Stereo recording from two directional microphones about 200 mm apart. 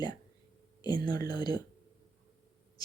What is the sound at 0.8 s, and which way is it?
Speech, 20° left (ahead or behind).